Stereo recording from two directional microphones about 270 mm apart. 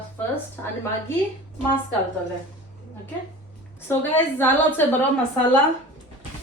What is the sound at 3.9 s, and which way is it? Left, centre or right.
Speech, centre.